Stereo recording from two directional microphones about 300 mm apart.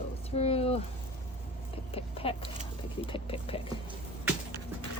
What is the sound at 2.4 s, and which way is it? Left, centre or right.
Speech, centre.